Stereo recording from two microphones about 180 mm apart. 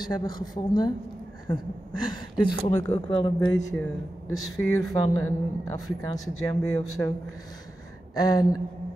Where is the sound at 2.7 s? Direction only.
15° left (ahead or behind).